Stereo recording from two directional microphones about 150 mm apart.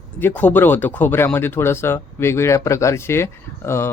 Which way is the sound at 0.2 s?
10° left (ahead or behind).